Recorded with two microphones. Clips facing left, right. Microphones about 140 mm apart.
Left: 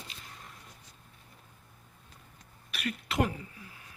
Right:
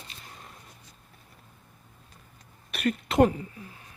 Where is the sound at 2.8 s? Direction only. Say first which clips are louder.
Right 9 dB; 40° right (ahead or behind).